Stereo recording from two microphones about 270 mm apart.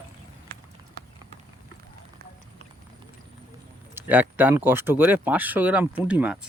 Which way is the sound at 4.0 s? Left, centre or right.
Centre.